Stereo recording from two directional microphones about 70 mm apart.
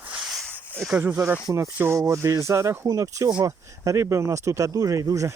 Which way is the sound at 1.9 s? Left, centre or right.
Right.